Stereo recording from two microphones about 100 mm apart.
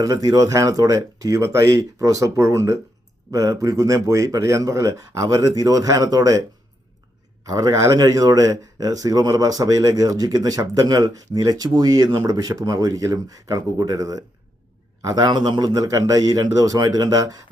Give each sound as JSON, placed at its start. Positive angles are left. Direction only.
{"t": 0.0, "sound": "speech", "side_deg": -40}
{"t": 7.4, "sound": "speech", "side_deg": -35}